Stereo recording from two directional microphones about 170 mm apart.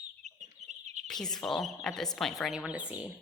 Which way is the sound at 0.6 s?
40° right (ahead or behind).